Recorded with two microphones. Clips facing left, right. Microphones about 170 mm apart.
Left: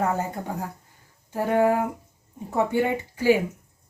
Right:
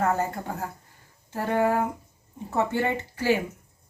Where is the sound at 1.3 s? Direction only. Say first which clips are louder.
Left 3 dB; 15° left (ahead or behind).